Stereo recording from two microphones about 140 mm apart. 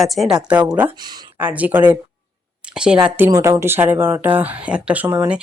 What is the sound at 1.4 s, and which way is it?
Speech, 10° right (ahead or behind).